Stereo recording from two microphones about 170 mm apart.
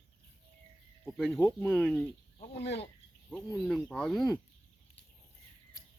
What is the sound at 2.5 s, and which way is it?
Speech, 80° left.